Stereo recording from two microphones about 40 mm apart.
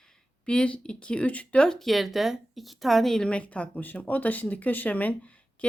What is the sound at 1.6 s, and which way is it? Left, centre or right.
Speech, centre.